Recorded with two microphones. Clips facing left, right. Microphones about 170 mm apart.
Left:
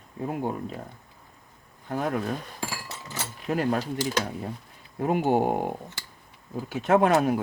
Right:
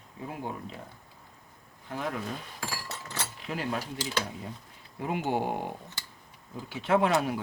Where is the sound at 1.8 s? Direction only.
45° left (ahead or behind).